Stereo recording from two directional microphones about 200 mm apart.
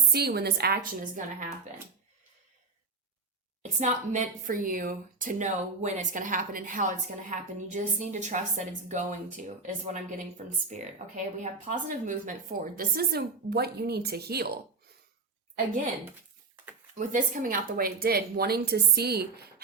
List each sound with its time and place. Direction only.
0.1 s a woman's voice: 55° right (ahead or behind)
3.6 s a woman's voice: 35° right (ahead or behind); by 14.6 s 55° right (ahead or behind)
17.0 s a woman's voice: 40° right (ahead or behind)